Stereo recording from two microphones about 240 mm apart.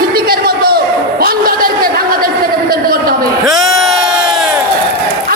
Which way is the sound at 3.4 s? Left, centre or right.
Centre.